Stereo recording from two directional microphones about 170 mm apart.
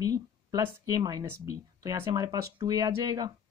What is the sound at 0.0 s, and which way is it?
Speech, 20° right (ahead or behind).